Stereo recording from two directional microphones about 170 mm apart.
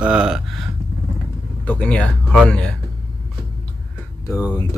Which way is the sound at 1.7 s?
5° left (ahead or behind).